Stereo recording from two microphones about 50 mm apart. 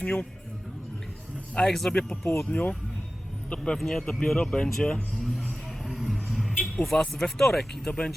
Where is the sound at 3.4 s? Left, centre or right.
Left.